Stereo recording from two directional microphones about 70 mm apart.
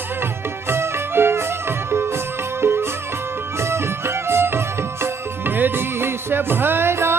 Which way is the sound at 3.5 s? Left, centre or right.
Right.